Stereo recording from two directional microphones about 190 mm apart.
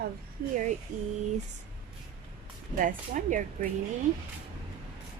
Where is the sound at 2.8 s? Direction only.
45° right (ahead or behind).